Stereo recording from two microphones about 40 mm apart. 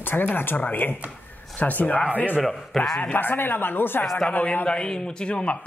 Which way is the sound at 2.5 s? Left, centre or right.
Centre.